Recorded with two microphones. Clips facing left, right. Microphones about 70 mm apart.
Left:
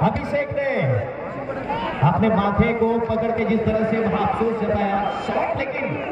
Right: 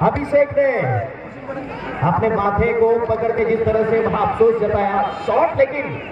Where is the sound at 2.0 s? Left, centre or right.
Right.